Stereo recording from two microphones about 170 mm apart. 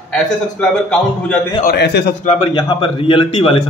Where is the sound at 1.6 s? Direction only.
70° left (ahead or behind).